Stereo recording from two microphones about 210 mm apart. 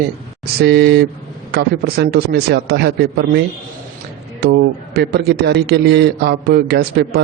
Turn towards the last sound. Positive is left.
turn(degrees=-50)  # may be behind; listen again after turning